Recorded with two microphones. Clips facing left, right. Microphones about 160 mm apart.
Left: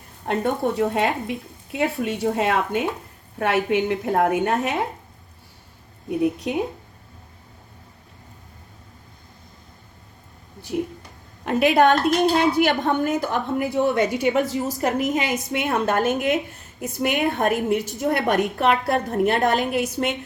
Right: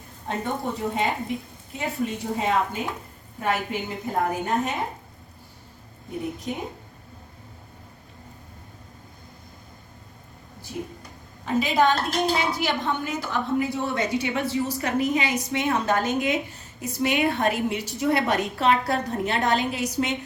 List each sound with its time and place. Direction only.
0.3 s speech: 75° left (ahead or behind)
6.1 s speech: 75° left (ahead or behind)
11.4 s a woman's voice: 65° left (ahead or behind)